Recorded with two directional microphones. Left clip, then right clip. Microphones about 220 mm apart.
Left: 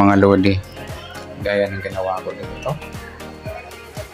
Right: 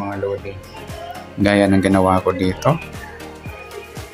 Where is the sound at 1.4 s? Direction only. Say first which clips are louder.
Right 5 dB; 20° right (ahead or behind).